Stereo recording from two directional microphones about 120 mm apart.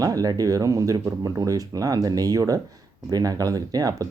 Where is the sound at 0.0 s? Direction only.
30° right (ahead or behind).